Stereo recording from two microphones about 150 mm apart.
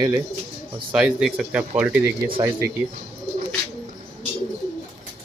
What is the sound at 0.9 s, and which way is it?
Speech, 5° right (ahead or behind).